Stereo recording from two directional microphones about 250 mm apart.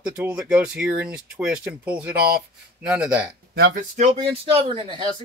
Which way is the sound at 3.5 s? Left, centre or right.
Right.